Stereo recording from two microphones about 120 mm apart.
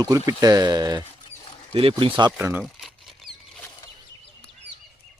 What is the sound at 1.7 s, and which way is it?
Speech, 50° right (ahead or behind).